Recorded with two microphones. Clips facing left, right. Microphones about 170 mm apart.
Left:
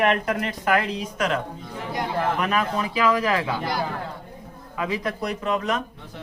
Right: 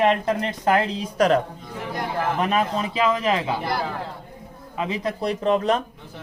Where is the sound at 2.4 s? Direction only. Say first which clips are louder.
Right 2 dB; 25° right (ahead or behind).